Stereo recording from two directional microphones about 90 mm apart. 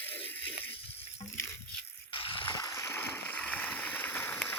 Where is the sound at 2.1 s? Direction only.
70° left (ahead or behind).